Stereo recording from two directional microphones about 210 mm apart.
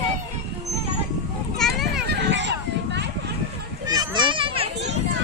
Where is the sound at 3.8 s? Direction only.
20° right (ahead or behind).